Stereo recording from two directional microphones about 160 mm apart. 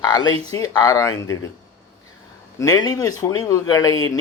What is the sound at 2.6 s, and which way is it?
Speech, 20° left (ahead or behind).